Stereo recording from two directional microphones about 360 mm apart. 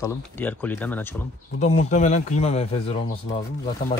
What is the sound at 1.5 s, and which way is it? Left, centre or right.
Speech, centre.